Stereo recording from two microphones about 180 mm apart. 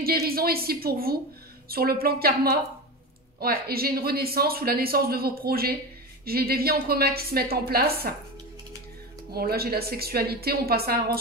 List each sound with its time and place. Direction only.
0.0 s speech: 55° right (ahead or behind)
9.3 s speech: 60° right (ahead or behind)